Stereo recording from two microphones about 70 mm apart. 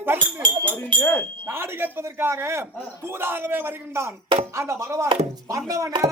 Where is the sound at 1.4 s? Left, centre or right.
Right.